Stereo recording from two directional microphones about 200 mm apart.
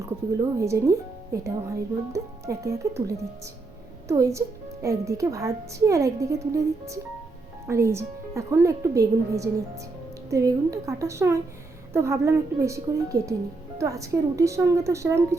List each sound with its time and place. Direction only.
0.6 s speech: 15° right (ahead or behind)
4.1 s speech: 15° right (ahead or behind)